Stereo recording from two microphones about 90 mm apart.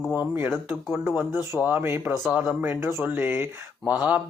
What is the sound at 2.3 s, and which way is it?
Speech, 15° right (ahead or behind).